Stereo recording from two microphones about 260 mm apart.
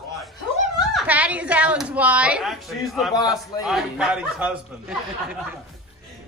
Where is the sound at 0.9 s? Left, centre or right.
Centre.